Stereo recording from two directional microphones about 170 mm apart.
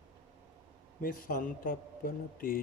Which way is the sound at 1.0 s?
55° left (ahead or behind).